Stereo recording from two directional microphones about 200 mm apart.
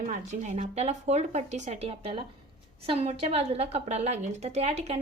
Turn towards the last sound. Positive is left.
turn(degrees=-30)  # may be behind; listen again after turning